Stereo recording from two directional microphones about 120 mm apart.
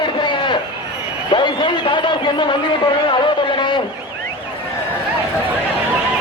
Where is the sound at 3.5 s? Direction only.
40° left (ahead or behind).